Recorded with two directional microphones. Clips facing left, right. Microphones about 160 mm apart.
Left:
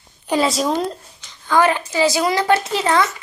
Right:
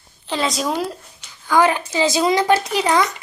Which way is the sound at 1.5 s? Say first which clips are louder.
Even; 15° right (ahead or behind).